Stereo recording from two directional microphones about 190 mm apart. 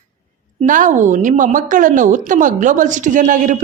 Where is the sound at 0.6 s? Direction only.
45° right (ahead or behind).